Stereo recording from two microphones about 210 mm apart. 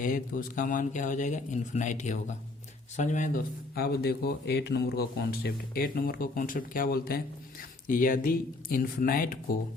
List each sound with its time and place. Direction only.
0.0 s speech: 40° left (ahead or behind)